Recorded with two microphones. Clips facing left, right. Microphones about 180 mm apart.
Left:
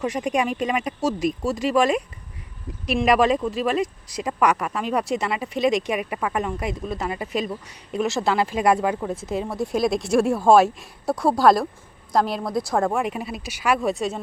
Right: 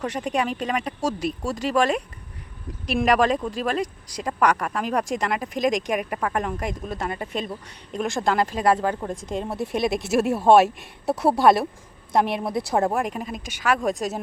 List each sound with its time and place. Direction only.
0.0 s speech: 10° left (ahead or behind)
12.7 s speech: centre (ahead or behind)